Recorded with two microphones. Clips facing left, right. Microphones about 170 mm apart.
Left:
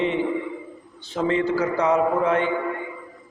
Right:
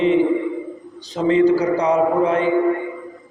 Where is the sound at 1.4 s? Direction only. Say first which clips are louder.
Right 6 dB; 35° right (ahead or behind).